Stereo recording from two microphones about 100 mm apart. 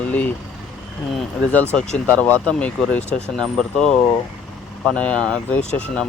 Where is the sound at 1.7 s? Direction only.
10° left (ahead or behind).